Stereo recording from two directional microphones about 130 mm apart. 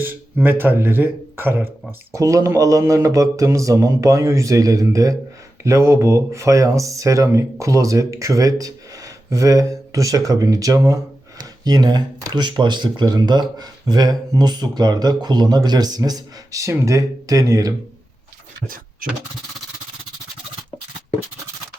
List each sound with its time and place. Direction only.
0.0 s speech: 15° right (ahead or behind)